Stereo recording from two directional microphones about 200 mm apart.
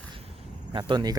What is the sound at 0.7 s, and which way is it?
Speech, 25° right (ahead or behind).